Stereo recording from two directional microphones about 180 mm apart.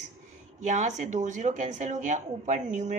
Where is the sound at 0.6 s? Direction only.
40° right (ahead or behind).